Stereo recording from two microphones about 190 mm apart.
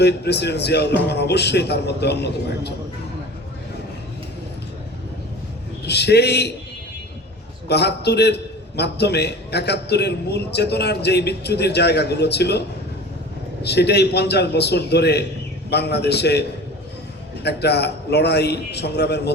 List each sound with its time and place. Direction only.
0.0 s a man's voice: 60° left (ahead or behind)
5.8 s a man's voice: 60° left (ahead or behind)
7.7 s a man's voice: 60° left (ahead or behind)